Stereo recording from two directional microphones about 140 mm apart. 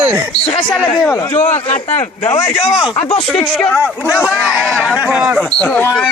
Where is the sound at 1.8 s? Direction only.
15° left (ahead or behind).